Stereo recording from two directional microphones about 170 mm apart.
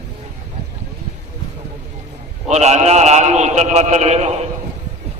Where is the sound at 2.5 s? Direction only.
40° right (ahead or behind).